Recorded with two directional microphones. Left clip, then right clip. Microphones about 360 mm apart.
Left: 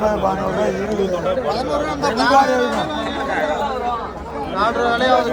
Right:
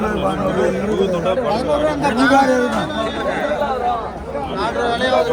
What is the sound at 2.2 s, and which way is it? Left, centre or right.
Speech, left.